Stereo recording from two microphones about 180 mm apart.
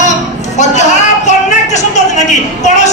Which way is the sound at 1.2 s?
40° left (ahead or behind).